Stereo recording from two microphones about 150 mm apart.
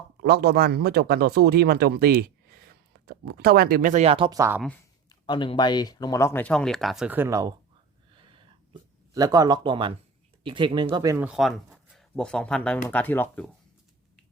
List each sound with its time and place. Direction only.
0.2 s speech: 90° right; by 4.0 s 65° right (ahead or behind)
4.0 s speech: 40° right (ahead or behind)
4.3 s speech: 20° right (ahead or behind)
5.0 s speech: 30° left (ahead or behind); by 7.1 s centre (ahead or behind)
7.1 s speech: 15° right (ahead or behind)
8.1 s a sound: 35° right (ahead or behind)
9.1 s speech: 25° right (ahead or behind)
10.9 s speech: 20° right (ahead or behind)
11.3 s speech: centre (ahead or behind)